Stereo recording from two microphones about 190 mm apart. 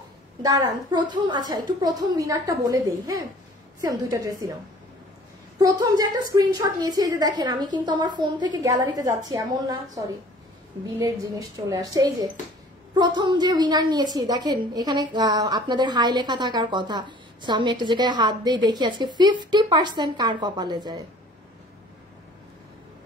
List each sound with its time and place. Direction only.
0.4 s a woman's voice: 20° right (ahead or behind)
5.6 s a woman's voice: 20° right (ahead or behind)